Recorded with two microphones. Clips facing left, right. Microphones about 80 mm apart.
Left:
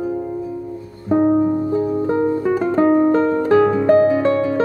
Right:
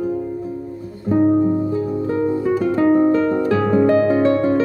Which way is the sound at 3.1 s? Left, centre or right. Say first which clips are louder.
Left 2 dB; left.